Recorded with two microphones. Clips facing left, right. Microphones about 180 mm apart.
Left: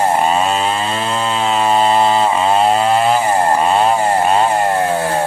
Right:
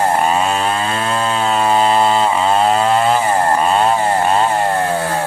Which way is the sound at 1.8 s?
10° left (ahead or behind).